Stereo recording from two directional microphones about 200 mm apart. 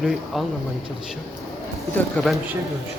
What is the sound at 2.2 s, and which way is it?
Speech, 5° left (ahead or behind).